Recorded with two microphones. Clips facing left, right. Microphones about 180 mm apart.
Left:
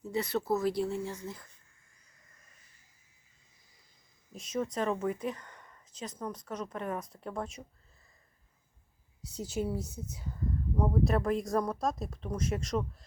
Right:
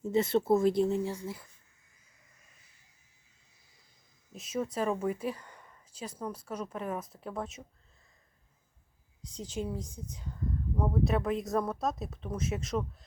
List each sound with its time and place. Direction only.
0.0 s speech: 25° right (ahead or behind)
4.3 s speech: 5° right (ahead or behind)
9.2 s speech: 10° left (ahead or behind)